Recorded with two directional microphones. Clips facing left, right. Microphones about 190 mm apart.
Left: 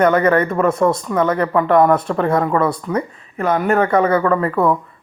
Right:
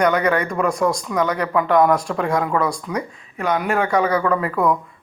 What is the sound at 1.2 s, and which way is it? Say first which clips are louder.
Speech: left 3 dB; 30° left (ahead or behind).